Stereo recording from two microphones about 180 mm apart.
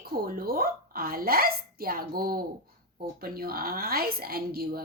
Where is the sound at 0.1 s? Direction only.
55° right (ahead or behind).